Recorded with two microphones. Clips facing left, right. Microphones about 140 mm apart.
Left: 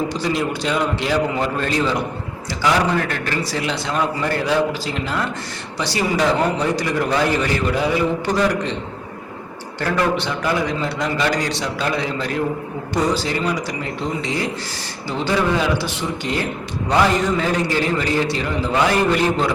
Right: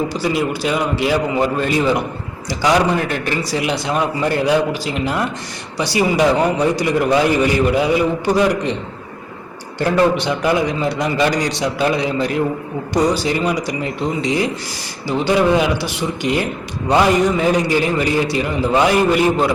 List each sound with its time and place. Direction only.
0.1 s a man's voice: 5° right (ahead or behind)
9.8 s a man's voice: 15° right (ahead or behind)